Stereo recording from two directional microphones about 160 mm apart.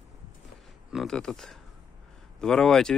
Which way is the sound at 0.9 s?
Centre (ahead or behind).